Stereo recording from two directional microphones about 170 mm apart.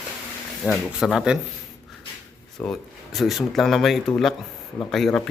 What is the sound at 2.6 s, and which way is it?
Speech, centre (ahead or behind).